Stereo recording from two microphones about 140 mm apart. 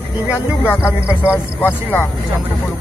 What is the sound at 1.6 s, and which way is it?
Speech, 10° left (ahead or behind).